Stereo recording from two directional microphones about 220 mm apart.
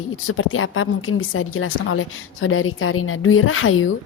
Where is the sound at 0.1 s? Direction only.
65° left (ahead or behind).